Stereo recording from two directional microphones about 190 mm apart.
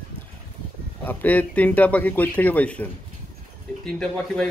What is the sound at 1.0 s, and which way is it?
A man's voice, 10° left (ahead or behind).